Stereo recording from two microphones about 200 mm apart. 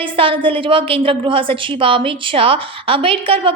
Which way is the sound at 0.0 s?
25° right (ahead or behind).